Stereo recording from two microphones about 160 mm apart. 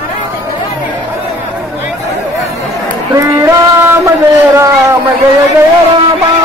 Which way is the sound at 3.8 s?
15° right (ahead or behind).